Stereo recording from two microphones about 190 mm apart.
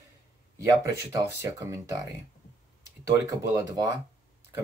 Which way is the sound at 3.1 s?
20° right (ahead or behind).